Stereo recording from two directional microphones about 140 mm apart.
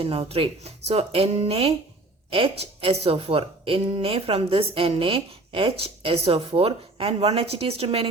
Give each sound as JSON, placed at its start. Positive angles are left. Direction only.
{"t": 0.0, "sound": "a woman's voice", "side_deg": -45}